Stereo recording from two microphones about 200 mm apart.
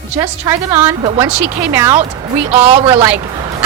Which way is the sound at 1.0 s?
25° right (ahead or behind).